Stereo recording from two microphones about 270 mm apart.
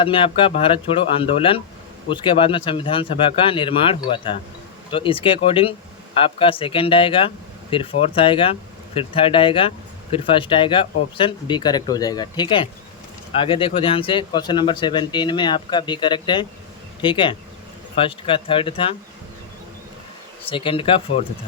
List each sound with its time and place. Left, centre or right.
0.0 s speech: centre
20.5 s speech: centre